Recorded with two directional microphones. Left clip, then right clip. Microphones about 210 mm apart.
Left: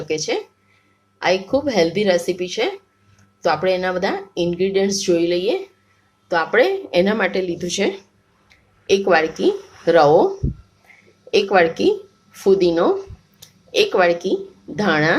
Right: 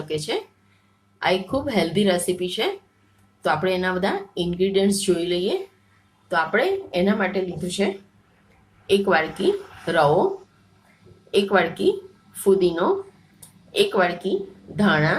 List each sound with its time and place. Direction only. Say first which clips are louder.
0.1 s a woman's voice: left 4 dB; 20° left (ahead or behind)
11.3 s a woman's voice: left 5 dB; 30° left (ahead or behind)